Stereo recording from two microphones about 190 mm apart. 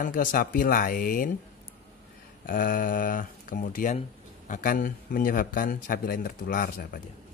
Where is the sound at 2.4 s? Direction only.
45° left (ahead or behind).